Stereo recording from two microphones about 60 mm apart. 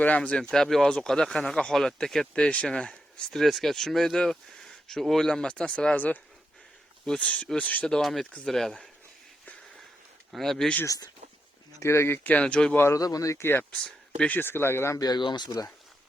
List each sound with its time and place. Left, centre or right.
0.0 s speech: left
3.3 s speech: centre; by 7.9 s left
7.9 s speech: centre
10.3 s speech: centre
11.8 s speech: left
12.5 s speech: centre
12.9 s speech: left
13.3 s speech: left
13.7 s speech: left
14.3 s speech: left
14.9 s speech: left